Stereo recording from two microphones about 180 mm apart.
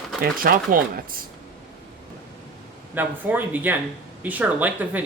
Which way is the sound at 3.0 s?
10° right (ahead or behind).